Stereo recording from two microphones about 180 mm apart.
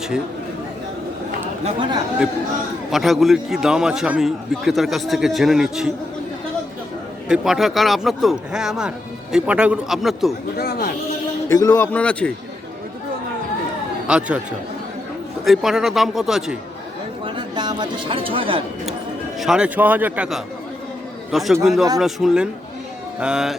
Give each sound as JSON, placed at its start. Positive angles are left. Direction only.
{"t": 1.6, "sound": "speech", "side_deg": -25}
{"t": 2.9, "sound": "a man's voice", "side_deg": 0}
{"t": 7.3, "sound": "a man's voice", "side_deg": 0}
{"t": 10.6, "sound": "speech", "side_deg": 60}
{"t": 11.4, "sound": "speech", "side_deg": 15}
{"t": 14.1, "sound": "a man's voice", "side_deg": -5}
{"t": 15.4, "sound": "a man's voice", "side_deg": 0}
{"t": 17.2, "sound": "speech", "side_deg": -25}
{"t": 19.4, "sound": "a man's voice", "side_deg": -5}
{"t": 21.6, "sound": "a man's voice", "side_deg": 0}